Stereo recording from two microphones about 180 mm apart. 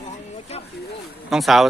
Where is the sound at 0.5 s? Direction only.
35° left (ahead or behind).